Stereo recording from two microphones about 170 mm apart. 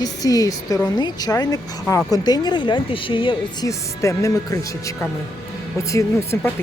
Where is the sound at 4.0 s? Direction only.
20° left (ahead or behind).